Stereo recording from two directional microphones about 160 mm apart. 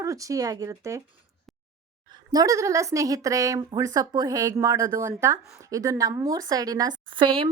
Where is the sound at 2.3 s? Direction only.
20° right (ahead or behind).